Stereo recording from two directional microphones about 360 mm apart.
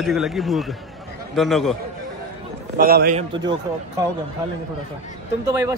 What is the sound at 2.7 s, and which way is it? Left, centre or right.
Speech, right.